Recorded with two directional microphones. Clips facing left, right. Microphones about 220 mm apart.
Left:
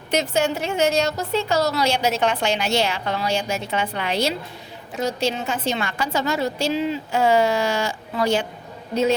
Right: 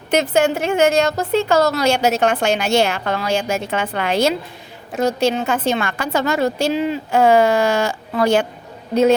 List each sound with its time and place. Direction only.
0.1 s a woman's voice: 55° right (ahead or behind)